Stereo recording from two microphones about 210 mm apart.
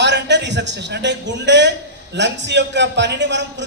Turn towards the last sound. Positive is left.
turn(degrees=-55)  # may be behind; listen again after turning